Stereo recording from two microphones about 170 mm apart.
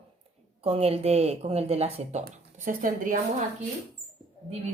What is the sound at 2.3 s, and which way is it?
Speech, 50° right (ahead or behind).